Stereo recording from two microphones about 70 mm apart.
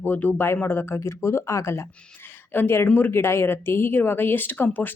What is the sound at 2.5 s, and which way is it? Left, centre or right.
Speech, left.